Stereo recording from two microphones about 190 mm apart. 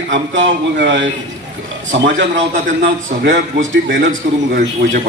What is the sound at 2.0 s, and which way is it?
A man's voice, 70° right (ahead or behind).